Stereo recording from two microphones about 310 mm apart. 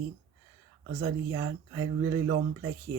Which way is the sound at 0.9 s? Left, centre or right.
Right.